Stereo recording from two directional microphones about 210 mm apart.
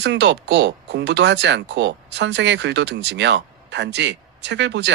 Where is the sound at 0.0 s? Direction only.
60° right (ahead or behind).